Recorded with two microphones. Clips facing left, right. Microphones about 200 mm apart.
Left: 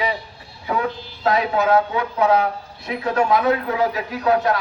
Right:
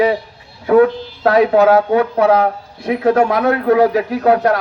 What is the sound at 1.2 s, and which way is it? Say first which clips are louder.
Speech: right 8 dB; 60° right (ahead or behind).